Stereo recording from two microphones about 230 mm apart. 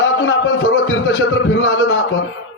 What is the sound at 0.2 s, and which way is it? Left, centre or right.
Speech, left.